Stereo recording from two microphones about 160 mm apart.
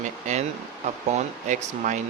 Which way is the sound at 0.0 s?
45° right (ahead or behind).